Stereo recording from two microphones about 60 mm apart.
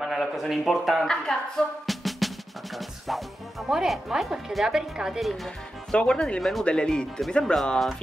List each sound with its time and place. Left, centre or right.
0.0 s a man's voice: centre
1.0 s speech: centre
1.9 s music: centre
5.9 s speech: centre